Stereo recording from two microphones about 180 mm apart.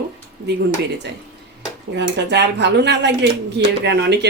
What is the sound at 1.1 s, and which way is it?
Speech, 70° right (ahead or behind).